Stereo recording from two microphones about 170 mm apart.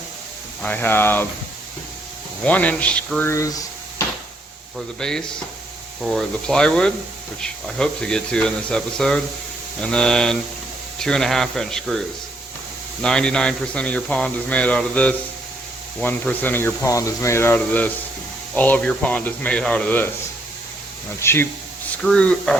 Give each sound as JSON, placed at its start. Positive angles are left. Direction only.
{"t": 0.6, "sound": "a man's voice", "side_deg": 10}
{"t": 2.4, "sound": "speech", "side_deg": 10}
{"t": 4.9, "sound": "a man's voice", "side_deg": 5}
{"t": 21.2, "sound": "a man's voice", "side_deg": 15}